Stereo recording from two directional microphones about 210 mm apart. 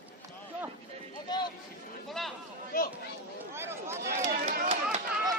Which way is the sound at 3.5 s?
10° right (ahead or behind).